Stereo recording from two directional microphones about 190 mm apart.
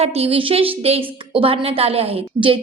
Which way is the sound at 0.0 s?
30° right (ahead or behind).